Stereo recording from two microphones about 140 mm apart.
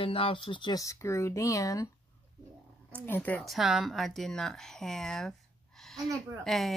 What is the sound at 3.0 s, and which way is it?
Speech, 15° left (ahead or behind).